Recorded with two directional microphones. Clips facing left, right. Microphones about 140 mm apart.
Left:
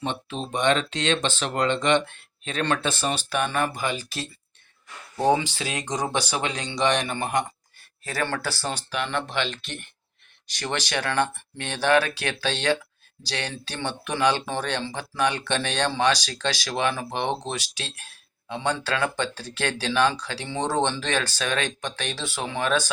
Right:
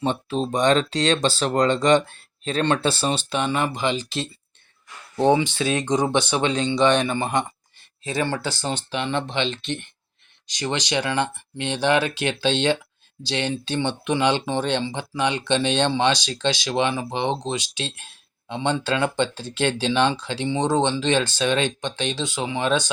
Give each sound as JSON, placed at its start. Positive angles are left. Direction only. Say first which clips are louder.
{"t": 0.0, "sound": "speech", "louder": "right 6 dB", "side_deg": -35}